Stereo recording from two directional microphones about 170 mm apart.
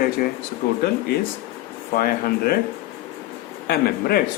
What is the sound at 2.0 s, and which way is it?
Speech, 60° left (ahead or behind).